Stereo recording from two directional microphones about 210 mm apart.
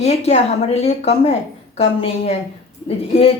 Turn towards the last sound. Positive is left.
turn(degrees=30)  # may be behind; listen again after turning